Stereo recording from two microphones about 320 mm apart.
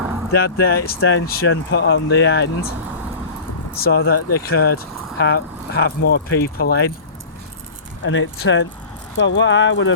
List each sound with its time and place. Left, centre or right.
0.3 s speech: left
3.8 s speech: left
8.0 s speech: left